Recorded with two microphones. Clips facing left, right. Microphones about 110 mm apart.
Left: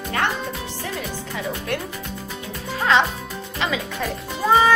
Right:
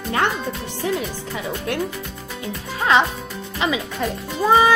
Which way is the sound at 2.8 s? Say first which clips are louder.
Right 1 dB; 10° right (ahead or behind).